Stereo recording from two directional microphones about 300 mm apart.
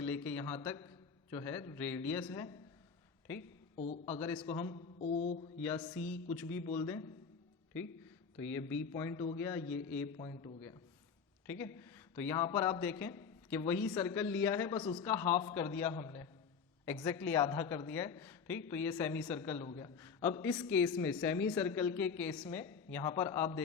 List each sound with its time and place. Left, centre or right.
0.0 s a man's voice: centre
4.2 s a man's voice: centre
4.4 s a sound: centre
5.6 s a man's voice: centre
8.4 s a man's voice: centre
10.2 s a man's voice: centre